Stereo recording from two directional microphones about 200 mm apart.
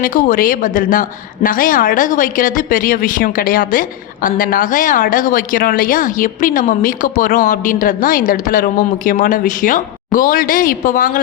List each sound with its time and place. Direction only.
0.0 s a woman's voice: 45° left (ahead or behind)